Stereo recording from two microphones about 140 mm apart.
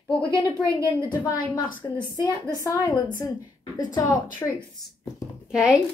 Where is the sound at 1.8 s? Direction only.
20° left (ahead or behind).